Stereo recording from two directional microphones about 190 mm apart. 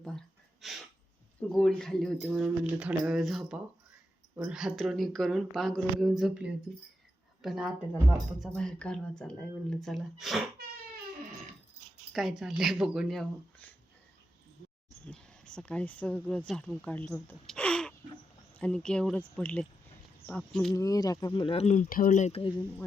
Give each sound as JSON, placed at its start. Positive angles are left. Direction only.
{"t": 0.0, "sound": "a sound", "side_deg": 0}
{"t": 1.4, "sound": "speech", "side_deg": 5}
{"t": 12.1, "sound": "speech", "side_deg": 0}
{"t": 15.0, "sound": "speech", "side_deg": 5}
{"t": 20.7, "sound": "speech", "side_deg": 20}